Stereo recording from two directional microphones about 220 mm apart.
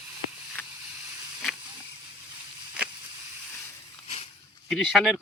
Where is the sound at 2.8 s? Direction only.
5° right (ahead or behind).